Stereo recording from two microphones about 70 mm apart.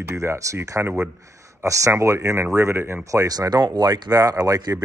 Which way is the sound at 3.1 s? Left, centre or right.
Right.